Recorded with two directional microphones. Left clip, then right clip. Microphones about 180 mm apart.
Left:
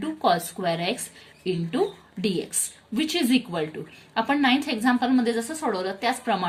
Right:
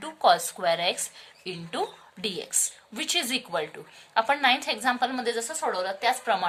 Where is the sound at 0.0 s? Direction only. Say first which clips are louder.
Right 1 dB; 30° right (ahead or behind).